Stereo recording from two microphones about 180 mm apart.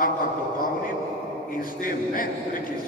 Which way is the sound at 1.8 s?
50° left (ahead or behind).